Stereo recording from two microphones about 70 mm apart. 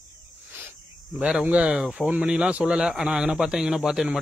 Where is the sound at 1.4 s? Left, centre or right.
Centre.